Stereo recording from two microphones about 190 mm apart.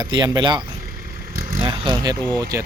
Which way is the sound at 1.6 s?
25° right (ahead or behind).